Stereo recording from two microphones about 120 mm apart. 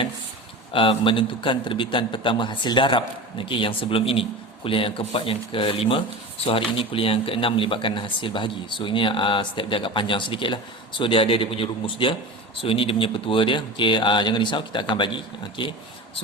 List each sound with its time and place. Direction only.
0.7 s speech: 45° left (ahead or behind)